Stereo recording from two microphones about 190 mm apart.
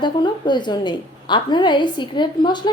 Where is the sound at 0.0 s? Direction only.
25° left (ahead or behind).